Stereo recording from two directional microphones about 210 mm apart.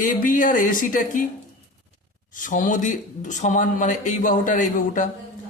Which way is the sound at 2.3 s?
40° left (ahead or behind).